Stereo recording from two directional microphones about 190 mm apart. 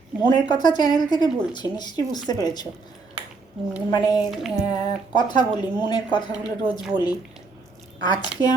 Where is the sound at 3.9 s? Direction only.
20° left (ahead or behind).